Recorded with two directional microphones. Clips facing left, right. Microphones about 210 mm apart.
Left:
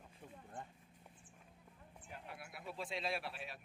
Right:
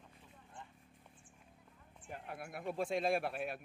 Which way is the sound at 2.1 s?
50° right (ahead or behind).